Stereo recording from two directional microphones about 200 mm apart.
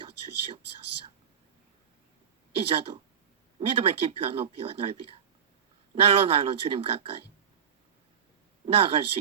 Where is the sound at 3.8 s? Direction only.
25° right (ahead or behind).